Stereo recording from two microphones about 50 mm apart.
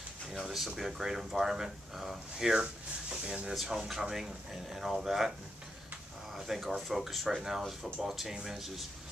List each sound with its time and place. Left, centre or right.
0.3 s speech: centre; by 3.5 s right
3.6 s speech: centre
6.3 s speech: centre